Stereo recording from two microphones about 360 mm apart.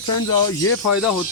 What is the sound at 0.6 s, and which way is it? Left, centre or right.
Speech, left.